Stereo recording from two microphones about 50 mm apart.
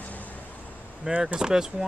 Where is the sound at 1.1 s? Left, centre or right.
Centre.